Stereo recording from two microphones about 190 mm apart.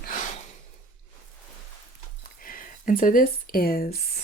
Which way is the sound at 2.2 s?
45° left (ahead or behind).